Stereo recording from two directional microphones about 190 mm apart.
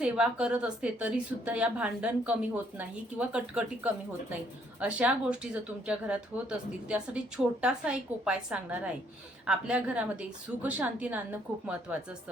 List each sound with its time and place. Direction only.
0.0 s a woman's voice: 5° right (ahead or behind)
4.8 s a woman's voice: 5° right (ahead or behind)